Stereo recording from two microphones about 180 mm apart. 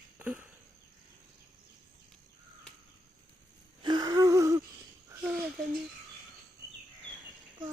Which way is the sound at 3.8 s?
25° right (ahead or behind).